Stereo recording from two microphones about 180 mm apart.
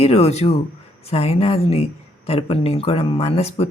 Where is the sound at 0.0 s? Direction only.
35° left (ahead or behind).